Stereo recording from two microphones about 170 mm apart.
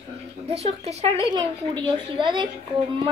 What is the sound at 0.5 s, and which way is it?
A woman's voice, 40° right (ahead or behind).